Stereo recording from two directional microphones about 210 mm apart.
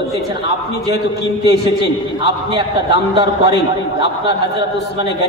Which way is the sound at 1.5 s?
55° left (ahead or behind).